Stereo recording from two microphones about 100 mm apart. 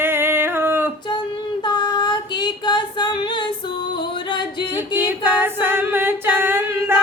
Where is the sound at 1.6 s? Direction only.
50° left (ahead or behind).